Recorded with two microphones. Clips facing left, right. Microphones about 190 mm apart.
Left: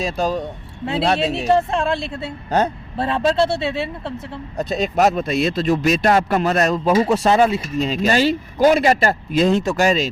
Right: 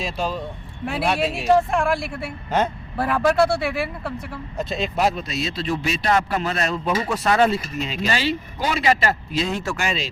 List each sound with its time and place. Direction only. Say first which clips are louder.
0.0 s a man's voice: left 5 dB; 40° left (ahead or behind)
0.9 s speech: left 3 dB; 25° left (ahead or behind)
4.5 s speech: left 5 dB; 40° left (ahead or behind)
7.3 s speech: right 1 dB; 15° left (ahead or behind)
7.8 s a man's voice: left 7 dB; 40° left (ahead or behind)